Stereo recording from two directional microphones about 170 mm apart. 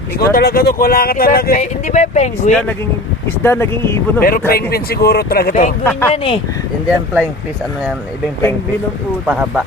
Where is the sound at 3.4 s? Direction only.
15° left (ahead or behind).